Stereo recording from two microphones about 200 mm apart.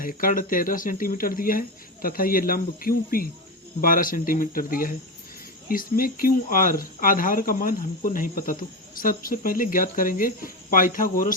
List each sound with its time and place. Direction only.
0.0 s speech: 45° left (ahead or behind)